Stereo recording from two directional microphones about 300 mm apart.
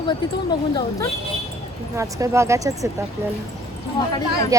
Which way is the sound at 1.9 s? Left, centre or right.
Centre.